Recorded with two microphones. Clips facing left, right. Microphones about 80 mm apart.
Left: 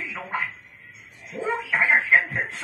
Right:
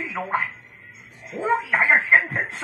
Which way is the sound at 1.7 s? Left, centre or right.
Right.